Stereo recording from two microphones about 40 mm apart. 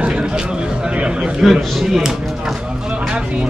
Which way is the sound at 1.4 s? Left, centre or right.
Centre.